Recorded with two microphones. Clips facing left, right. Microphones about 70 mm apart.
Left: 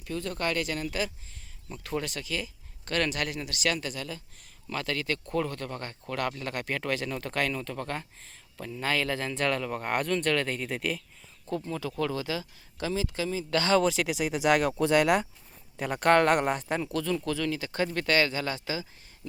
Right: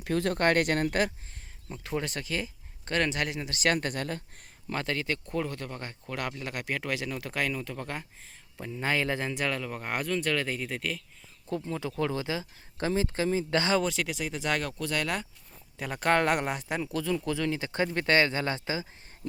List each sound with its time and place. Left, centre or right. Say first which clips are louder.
0.0 s speech: right 5 dB; right
2.0 s speech: right 1 dB; right
3.5 s speech: right 5 dB; right
4.7 s speech: even; right; by 8.0 s centre
8.5 s speech: even; centre
9.4 s speech: left 3 dB; centre
11.5 s speech: even; centre; by 13.6 s right
13.8 s speech: left 4 dB; centre
15.8 s speech: left 3 dB; centre
17.2 s speech: even; right